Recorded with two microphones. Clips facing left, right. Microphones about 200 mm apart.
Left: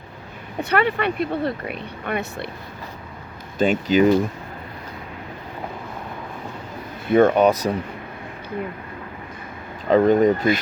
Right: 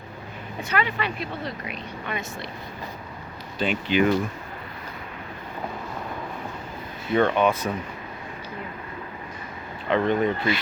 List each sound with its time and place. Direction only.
0.6 s speech: 60° left (ahead or behind)
3.6 s speech: 45° left (ahead or behind)
7.1 s speech: 45° left (ahead or behind)
9.9 s speech: 40° left (ahead or behind)